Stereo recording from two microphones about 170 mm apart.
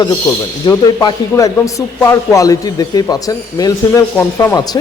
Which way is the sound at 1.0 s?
20° left (ahead or behind).